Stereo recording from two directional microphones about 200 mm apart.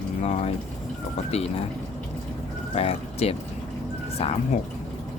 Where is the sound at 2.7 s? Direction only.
30° left (ahead or behind).